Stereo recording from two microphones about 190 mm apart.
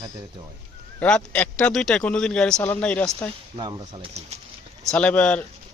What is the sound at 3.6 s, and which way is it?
Speech, 25° right (ahead or behind).